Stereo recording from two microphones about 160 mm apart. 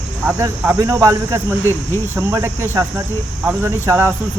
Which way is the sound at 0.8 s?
20° right (ahead or behind).